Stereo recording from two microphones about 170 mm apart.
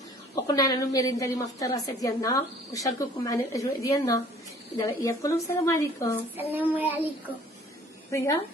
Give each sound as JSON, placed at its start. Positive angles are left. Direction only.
{"t": 0.5, "sound": "a woman's voice", "side_deg": 20}
{"t": 6.5, "sound": "child singing", "side_deg": -10}
{"t": 8.1, "sound": "a woman's voice", "side_deg": 15}